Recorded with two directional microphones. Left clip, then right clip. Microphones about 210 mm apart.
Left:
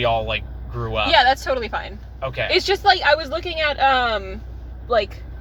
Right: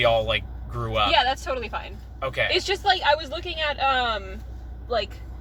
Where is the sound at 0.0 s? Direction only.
35° right (ahead or behind).